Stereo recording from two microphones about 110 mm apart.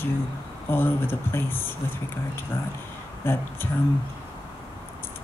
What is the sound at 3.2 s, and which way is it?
Speech, 20° left (ahead or behind).